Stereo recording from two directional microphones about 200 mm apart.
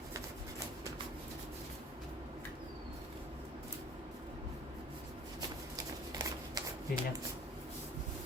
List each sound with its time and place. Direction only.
6.1 s shuffling cards: 20° right (ahead or behind)